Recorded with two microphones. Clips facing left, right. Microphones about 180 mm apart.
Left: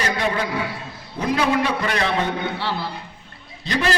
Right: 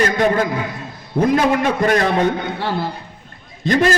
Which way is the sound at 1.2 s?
50° right (ahead or behind).